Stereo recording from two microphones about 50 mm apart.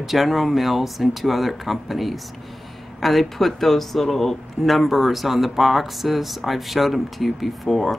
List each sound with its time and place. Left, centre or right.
0.0 s speech: centre